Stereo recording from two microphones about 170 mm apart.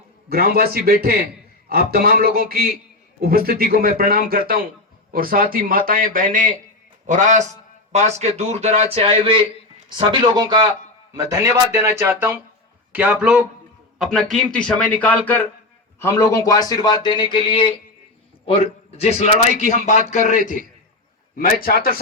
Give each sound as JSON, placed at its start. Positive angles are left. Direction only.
{"t": 0.3, "sound": "a man's voice", "side_deg": -65}
{"t": 11.2, "sound": "a man's voice", "side_deg": -15}